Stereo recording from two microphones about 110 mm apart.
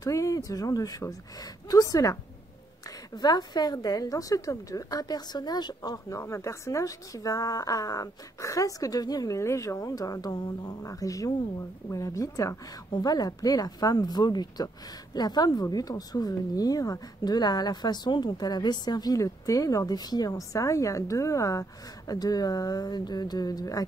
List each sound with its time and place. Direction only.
0.0 s speech: 30° left (ahead or behind)
3.2 s a woman's voice: 40° left (ahead or behind)